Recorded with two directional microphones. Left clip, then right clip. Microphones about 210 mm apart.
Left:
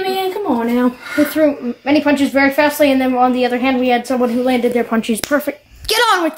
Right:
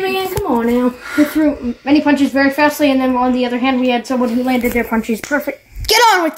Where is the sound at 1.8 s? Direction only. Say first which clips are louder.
Right 1 dB; 10° left (ahead or behind).